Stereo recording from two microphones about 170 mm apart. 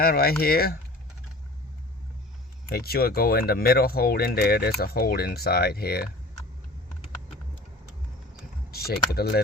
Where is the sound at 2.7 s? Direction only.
65° left (ahead or behind).